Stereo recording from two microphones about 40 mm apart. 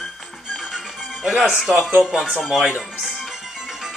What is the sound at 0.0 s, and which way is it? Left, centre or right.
Music, centre.